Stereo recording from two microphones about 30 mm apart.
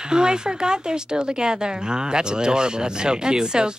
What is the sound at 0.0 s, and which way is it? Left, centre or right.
Speech, right.